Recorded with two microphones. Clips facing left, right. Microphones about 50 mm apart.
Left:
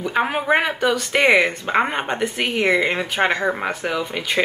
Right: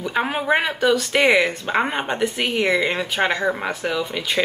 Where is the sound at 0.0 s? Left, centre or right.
Centre.